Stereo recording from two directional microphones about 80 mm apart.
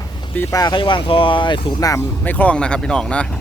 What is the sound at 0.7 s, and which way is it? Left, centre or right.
Speech, left.